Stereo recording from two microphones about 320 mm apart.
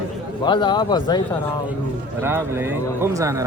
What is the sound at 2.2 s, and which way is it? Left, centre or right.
A man's voice, centre.